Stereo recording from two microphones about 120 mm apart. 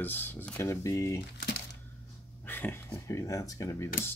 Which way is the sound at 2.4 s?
15° left (ahead or behind).